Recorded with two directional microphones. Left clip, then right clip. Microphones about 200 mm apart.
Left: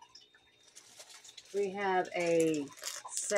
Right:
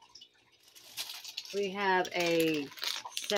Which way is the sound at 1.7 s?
15° right (ahead or behind).